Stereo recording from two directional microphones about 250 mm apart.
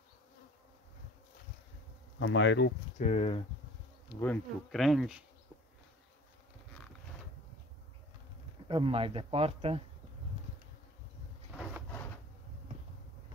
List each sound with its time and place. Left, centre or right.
2.1 s speech: left
3.0 s speech: left
4.2 s speech: centre
8.6 s speech: right